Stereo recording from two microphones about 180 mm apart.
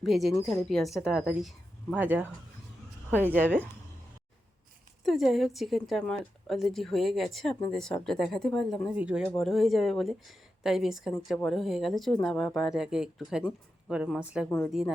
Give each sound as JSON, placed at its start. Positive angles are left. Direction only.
{"t": 0.0, "sound": "speech", "side_deg": 0}
{"t": 5.0, "sound": "speech", "side_deg": 0}